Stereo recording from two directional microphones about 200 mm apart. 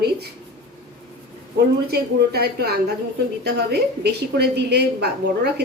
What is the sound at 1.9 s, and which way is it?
A woman's voice, 55° right (ahead or behind).